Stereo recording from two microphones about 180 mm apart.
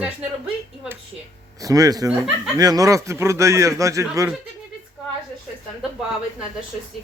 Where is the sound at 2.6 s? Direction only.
20° right (ahead or behind).